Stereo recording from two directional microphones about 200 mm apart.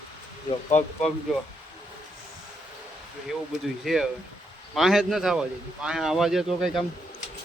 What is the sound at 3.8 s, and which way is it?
Speech, centre (ahead or behind).